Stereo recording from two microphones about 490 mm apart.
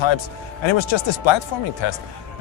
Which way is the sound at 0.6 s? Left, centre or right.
Left.